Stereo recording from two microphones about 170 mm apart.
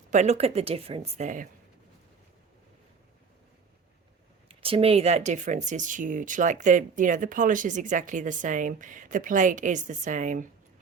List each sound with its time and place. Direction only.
0.1 s a woman's voice: 40° right (ahead or behind)
4.4 s speech: 35° right (ahead or behind); by 10.4 s 50° right (ahead or behind)